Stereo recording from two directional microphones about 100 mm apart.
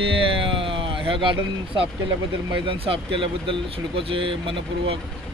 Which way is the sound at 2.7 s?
60° right (ahead or behind).